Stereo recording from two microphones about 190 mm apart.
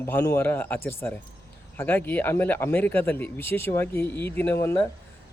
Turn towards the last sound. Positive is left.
turn(degrees=10)  # may be behind; listen again after turning